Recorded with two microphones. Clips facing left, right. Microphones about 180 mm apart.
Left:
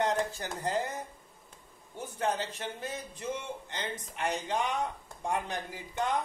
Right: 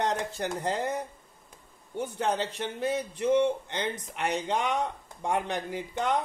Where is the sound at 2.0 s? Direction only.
70° right (ahead or behind).